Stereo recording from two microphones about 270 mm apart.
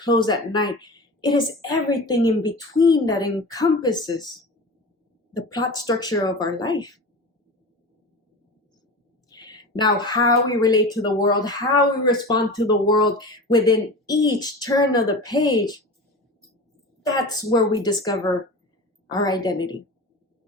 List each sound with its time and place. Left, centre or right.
0.0 s a woman's voice: centre
5.3 s speech: centre
9.3 s a sound: centre
10.5 s speech: centre
17.0 s speech: centre